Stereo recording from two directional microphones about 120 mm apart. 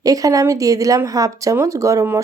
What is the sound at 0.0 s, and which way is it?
Speech, 30° right (ahead or behind).